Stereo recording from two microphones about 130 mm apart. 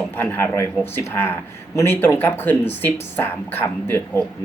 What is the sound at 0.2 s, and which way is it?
Speech, 15° left (ahead or behind).